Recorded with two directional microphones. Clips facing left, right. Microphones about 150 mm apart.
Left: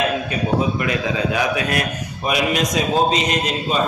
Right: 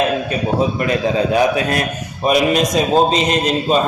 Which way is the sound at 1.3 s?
30° right (ahead or behind).